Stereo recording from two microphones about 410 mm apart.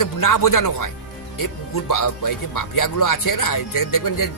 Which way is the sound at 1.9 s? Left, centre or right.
Left.